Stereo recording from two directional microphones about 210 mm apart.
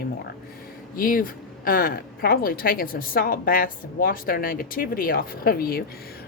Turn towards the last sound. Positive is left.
turn(degrees=45)  # may be behind; listen again after turning